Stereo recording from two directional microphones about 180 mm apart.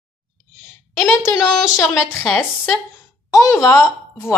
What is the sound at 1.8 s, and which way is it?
Speech, 10° left (ahead or behind).